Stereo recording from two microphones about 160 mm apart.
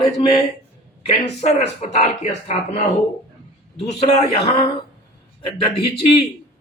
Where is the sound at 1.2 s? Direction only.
40° left (ahead or behind).